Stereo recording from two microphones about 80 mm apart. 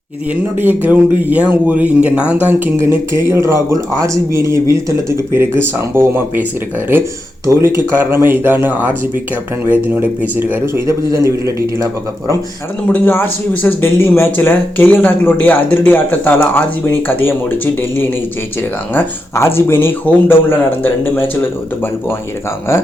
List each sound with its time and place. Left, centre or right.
0.6 s speech: right
2.7 s speech: right
7.4 s speech: right
9.6 s speech: right
10.8 s speech: right
12.9 s speech: left